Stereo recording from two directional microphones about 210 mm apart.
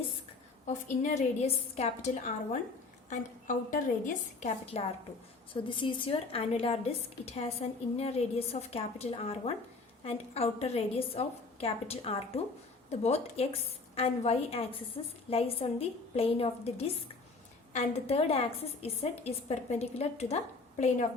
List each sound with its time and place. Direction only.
0.7 s a woman's voice: 30° left (ahead or behind)
3.1 s a woman's voice: 35° left (ahead or behind)